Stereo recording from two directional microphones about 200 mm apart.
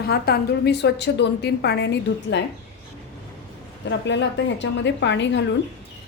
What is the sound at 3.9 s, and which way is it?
A woman's voice, 65° left (ahead or behind).